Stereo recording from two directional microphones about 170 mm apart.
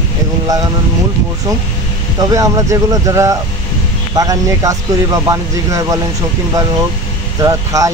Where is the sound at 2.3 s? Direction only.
20° right (ahead or behind).